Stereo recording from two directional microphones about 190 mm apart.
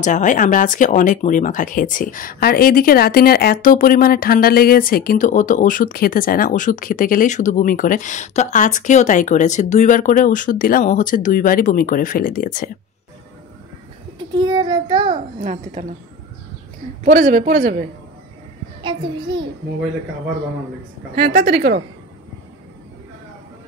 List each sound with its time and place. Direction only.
0.0 s speech: 40° left (ahead or behind)
14.1 s a sound: 25° right (ahead or behind)
15.4 s a man's voice: 40° right (ahead or behind)
17.0 s a man's voice: 40° right (ahead or behind)
18.8 s a child's voice: 25° right (ahead or behind)
21.1 s a woman's voice: 50° right (ahead or behind)